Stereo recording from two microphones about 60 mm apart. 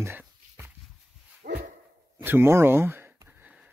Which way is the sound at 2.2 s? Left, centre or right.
Right.